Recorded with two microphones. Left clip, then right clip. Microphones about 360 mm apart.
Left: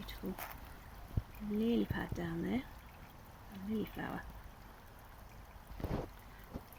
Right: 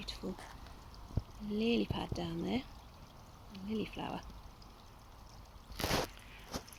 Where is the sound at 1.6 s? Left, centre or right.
Centre.